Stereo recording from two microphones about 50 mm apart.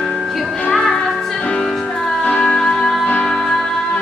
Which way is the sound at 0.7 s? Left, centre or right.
Centre.